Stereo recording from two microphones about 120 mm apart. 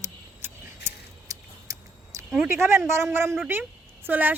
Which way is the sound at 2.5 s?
20° right (ahead or behind).